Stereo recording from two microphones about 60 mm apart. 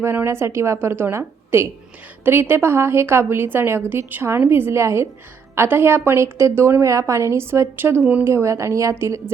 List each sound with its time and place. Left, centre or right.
0.3 s a woman's voice: right
6.8 s a woman's voice: right
7.8 s a woman's voice: right
8.2 s a woman's voice: right